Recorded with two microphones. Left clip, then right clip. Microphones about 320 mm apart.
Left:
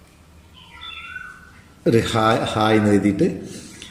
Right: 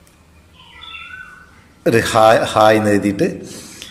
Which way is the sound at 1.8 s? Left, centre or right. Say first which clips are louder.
Right 6 dB; centre.